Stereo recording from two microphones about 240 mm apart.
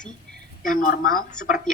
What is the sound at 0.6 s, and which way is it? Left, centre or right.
Speech, left.